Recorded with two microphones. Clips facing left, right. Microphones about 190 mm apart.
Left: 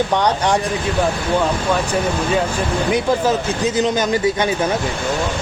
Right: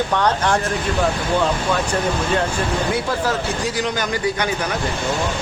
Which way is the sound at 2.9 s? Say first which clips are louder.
Left 4 dB; 20° left (ahead or behind).